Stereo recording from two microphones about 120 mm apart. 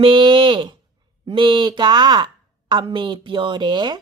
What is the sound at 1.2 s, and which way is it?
Speech, 45° right (ahead or behind).